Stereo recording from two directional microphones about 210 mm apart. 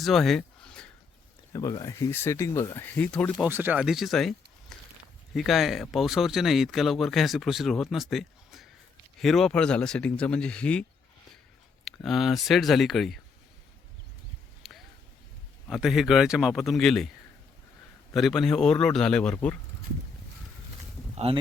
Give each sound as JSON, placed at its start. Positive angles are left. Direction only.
{"t": 0.0, "sound": "a sound", "side_deg": 0}
{"t": 1.5, "sound": "speech", "side_deg": 15}
{"t": 3.4, "sound": "speech", "side_deg": -10}
{"t": 11.9, "sound": "speech", "side_deg": 0}
{"t": 14.6, "sound": "a sound", "side_deg": 0}
{"t": 15.6, "sound": "speech", "side_deg": 0}
{"t": 18.1, "sound": "speech", "side_deg": 0}
{"t": 21.3, "sound": "speech", "side_deg": -25}